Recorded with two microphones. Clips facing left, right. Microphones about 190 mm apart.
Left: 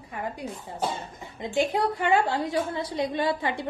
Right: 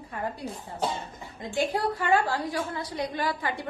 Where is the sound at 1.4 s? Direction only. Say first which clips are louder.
Left 2 dB; 20° left (ahead or behind).